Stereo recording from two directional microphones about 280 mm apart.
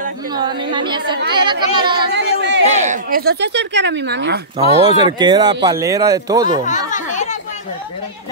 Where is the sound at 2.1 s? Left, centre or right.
Right.